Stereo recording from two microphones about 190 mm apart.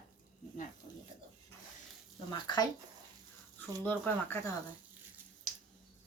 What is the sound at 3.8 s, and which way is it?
Speech, 10° left (ahead or behind).